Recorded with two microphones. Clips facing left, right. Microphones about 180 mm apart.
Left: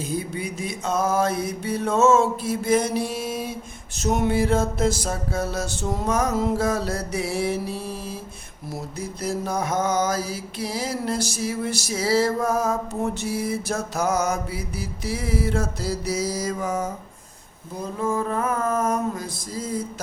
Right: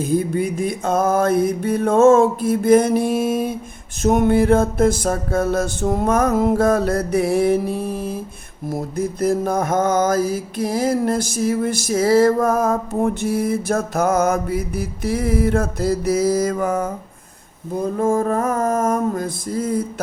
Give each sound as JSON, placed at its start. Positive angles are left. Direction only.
{"t": 0.0, "sound": "mantra", "side_deg": -50}
{"t": 4.0, "sound": "music", "side_deg": -50}
{"t": 8.7, "sound": "mantra", "side_deg": -55}